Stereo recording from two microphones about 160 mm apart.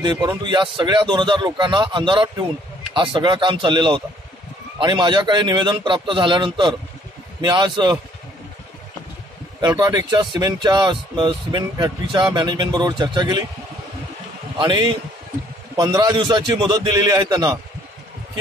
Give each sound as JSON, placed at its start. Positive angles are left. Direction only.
{"t": 0.0, "sound": "speech", "side_deg": -25}
{"t": 9.6, "sound": "speech", "side_deg": -25}
{"t": 14.6, "sound": "speech", "side_deg": -25}